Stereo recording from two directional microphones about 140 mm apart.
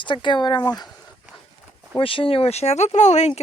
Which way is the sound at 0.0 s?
35° left (ahead or behind).